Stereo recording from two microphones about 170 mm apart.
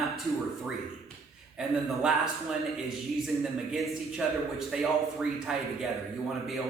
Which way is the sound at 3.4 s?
Centre (ahead or behind).